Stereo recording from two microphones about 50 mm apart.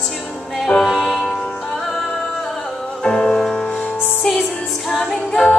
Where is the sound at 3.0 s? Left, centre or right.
Centre.